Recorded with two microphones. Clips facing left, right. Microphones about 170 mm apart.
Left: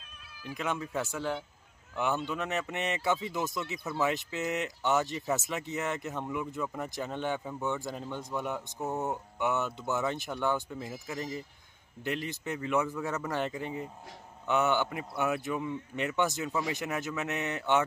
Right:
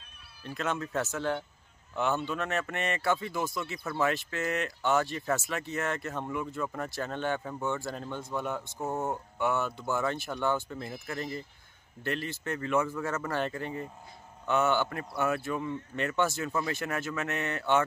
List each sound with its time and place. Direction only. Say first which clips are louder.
0.6 s speech: right 2 dB; 10° left (ahead or behind)
8.7 s speech: even; centre (ahead or behind)
9.0 s speech: right 2 dB; 15° left (ahead or behind)